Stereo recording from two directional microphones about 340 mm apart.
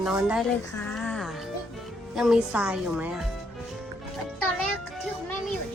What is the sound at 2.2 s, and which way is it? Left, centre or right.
A woman's voice, centre.